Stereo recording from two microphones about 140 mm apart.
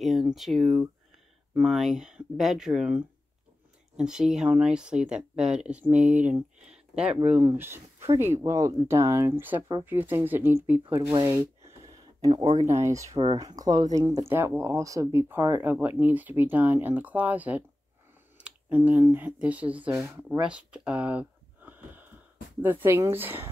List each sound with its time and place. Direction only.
0.0 s speech: centre (ahead or behind); by 11.1 s 20° right (ahead or behind)
11.2 s a sound: 25° right (ahead or behind)
12.7 s speech: 20° right (ahead or behind)
13.2 s speech: 35° right (ahead or behind); by 20.2 s 10° right (ahead or behind)
20.2 s a sound: 5° right (ahead or behind)
22.6 s speech: 15° right (ahead or behind)